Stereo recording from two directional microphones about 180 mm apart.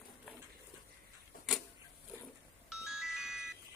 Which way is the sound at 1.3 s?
50° left (ahead or behind).